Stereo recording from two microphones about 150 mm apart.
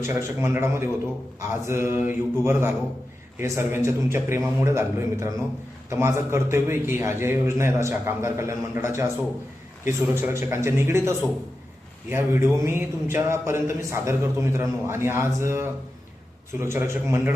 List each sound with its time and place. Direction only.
0.0 s speech: 15° right (ahead or behind)